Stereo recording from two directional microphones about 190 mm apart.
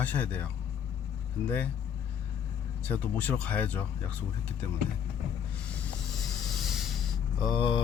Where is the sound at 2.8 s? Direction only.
10° left (ahead or behind).